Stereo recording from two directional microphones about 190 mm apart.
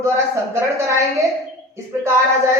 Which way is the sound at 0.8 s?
15° right (ahead or behind).